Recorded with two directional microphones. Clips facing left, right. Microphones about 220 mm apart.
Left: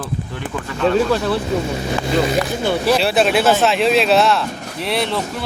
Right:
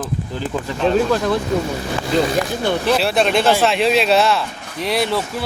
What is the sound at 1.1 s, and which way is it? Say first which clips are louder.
Speech: even; 5° left (ahead or behind).